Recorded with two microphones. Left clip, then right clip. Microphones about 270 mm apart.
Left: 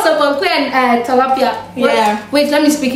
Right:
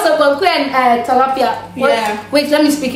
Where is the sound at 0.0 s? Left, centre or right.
Centre.